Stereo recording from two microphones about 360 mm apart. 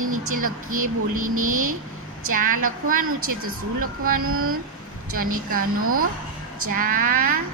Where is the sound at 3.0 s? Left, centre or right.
Right.